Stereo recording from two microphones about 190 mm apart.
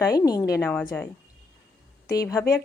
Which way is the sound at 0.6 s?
10° left (ahead or behind).